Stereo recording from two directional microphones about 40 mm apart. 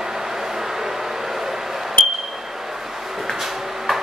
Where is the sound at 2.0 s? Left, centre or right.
Centre.